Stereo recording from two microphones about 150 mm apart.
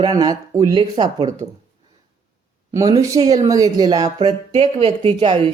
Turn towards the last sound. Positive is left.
turn(degrees=-35)  # may be behind; listen again after turning